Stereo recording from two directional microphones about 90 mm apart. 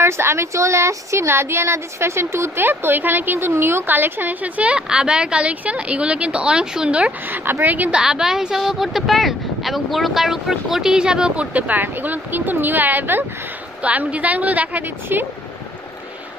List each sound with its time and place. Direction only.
0.0 s speech: 30° right (ahead or behind)